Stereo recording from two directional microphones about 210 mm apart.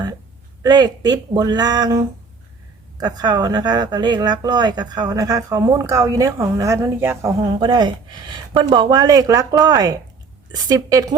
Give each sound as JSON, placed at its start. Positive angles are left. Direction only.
{"t": 0.6, "sound": "a woman's voice", "side_deg": -20}